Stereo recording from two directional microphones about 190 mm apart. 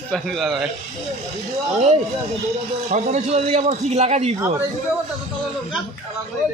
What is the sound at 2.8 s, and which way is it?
A man's voice, 35° right (ahead or behind).